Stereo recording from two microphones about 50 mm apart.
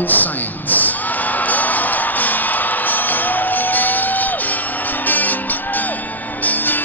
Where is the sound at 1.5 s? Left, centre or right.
Left.